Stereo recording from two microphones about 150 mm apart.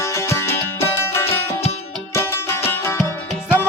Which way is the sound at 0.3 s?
15° left (ahead or behind).